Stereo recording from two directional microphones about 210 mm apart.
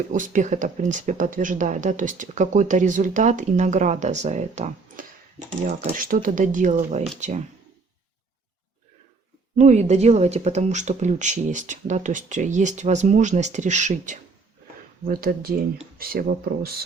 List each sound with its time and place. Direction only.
0.1 s speech: 35° right (ahead or behind)
9.6 s speech: 35° right (ahead or behind)